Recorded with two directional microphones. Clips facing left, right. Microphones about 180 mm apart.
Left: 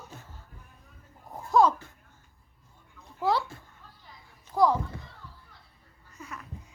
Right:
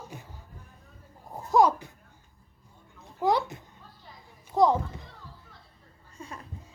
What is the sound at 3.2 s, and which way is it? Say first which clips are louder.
A child's voice: right 2 dB; 15° right (ahead or behind).